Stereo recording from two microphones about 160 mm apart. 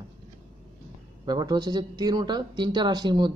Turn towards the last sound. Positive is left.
turn(degrees=-25)  # may be behind; listen again after turning